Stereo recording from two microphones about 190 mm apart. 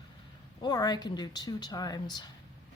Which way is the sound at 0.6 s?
20° left (ahead or behind).